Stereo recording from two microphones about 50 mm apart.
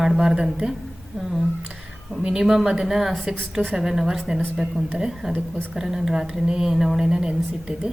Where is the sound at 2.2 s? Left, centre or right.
Centre.